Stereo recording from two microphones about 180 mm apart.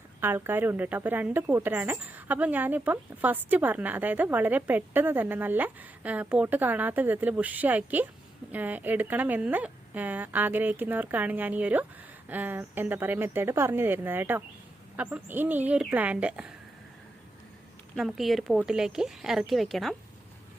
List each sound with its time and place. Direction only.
0.2 s speech: 10° right (ahead or behind)
17.9 s speech: centre (ahead or behind)